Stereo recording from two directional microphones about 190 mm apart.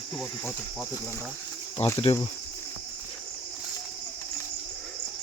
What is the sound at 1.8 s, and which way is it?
Speech, 35° left (ahead or behind).